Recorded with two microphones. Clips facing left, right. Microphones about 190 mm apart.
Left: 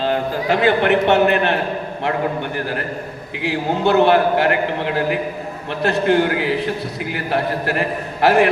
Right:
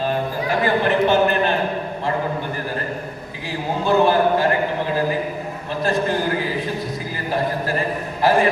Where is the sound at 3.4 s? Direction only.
70° left (ahead or behind).